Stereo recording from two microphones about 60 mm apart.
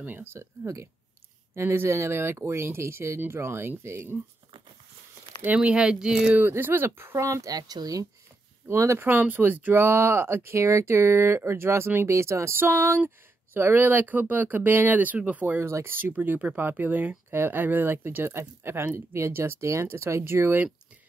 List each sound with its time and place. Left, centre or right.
0.0 s speech: right
0.4 s speech: right
1.5 s speech: right
3.2 s speech: right
5.6 s speech: centre
6.6 s speech: right
7.2 s speech: right
8.6 s speech: right
9.2 s speech: right
9.8 s speech: right
15.6 s speech: right
16.1 s speech: right